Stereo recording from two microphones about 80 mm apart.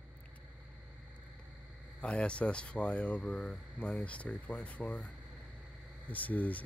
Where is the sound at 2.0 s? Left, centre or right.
Centre.